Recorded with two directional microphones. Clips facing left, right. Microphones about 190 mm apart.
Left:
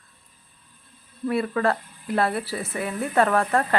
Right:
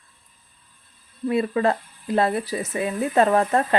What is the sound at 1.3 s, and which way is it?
Speech, 20° right (ahead or behind).